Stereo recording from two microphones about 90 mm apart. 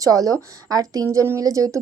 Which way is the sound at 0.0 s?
40° right (ahead or behind).